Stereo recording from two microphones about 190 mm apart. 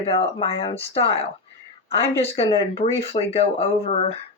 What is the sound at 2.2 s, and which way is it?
Speech, 30° left (ahead or behind).